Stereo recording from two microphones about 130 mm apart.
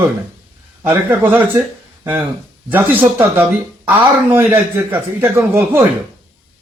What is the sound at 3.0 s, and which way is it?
A man's voice, 15° right (ahead or behind).